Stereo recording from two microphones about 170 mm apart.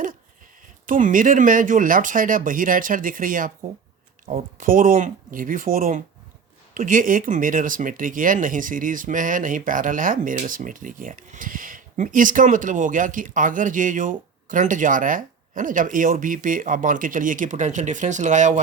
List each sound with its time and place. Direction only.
0.9 s speech: 50° right (ahead or behind)